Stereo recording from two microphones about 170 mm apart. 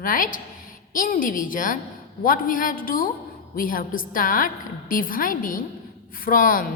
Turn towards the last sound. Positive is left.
turn(degrees=55)  # may be behind; listen again after turning